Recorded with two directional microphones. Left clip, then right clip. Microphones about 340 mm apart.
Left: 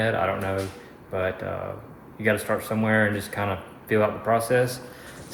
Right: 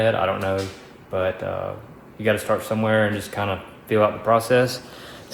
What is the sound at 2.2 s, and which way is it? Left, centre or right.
Speech, centre.